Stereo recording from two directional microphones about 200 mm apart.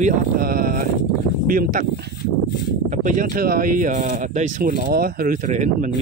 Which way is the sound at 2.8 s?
40° right (ahead or behind).